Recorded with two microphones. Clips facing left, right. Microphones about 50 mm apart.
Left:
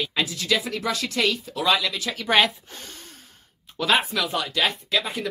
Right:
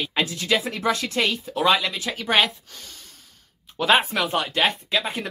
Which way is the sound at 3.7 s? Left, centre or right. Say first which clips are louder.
Right 2 dB; right.